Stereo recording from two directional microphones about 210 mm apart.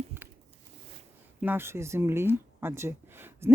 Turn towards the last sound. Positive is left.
turn(degrees=-10)  # may be behind; listen again after turning